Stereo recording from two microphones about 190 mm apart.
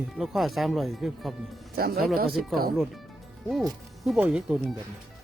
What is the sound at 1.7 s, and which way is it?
Speech, 50° right (ahead or behind).